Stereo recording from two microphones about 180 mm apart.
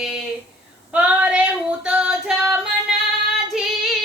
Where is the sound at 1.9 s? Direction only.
5° right (ahead or behind).